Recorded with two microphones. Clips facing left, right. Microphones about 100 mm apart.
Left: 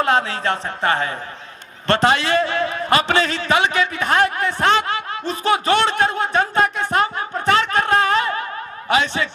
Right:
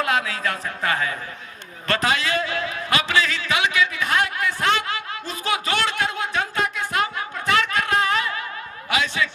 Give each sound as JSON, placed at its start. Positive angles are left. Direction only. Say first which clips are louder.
{"t": 0.0, "sound": "speech", "louder": "left 4 dB", "side_deg": 30}
{"t": 6.9, "sound": "a sound", "louder": "left 5 dB", "side_deg": 35}
{"t": 8.9, "sound": "speech", "louder": "left 4 dB", "side_deg": 35}